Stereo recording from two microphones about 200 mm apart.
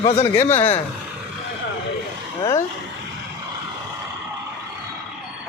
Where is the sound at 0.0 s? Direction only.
30° left (ahead or behind).